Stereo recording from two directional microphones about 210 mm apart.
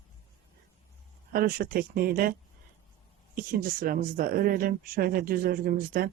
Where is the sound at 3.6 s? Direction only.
45° right (ahead or behind).